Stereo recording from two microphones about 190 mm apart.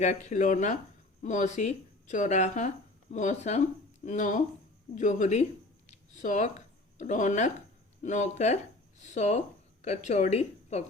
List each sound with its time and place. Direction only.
0.0 s speech: 40° left (ahead or behind)
5.9 s a sound: 40° left (ahead or behind)
7.0 s a woman's voice: 40° left (ahead or behind)